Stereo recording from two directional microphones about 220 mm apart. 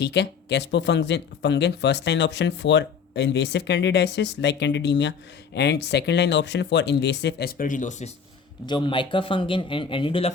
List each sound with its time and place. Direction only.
0.0 s speech: 50° left (ahead or behind); by 8.1 s 35° left (ahead or behind)
8.6 s a man's voice: 20° left (ahead or behind)